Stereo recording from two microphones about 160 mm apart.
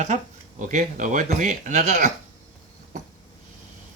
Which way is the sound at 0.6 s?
50° right (ahead or behind).